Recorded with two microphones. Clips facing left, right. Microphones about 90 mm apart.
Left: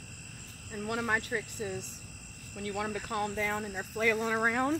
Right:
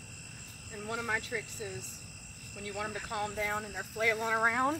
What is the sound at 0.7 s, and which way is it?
Speech, 60° left (ahead or behind).